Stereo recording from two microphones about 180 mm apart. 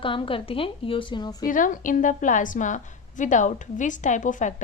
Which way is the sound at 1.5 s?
50° left (ahead or behind).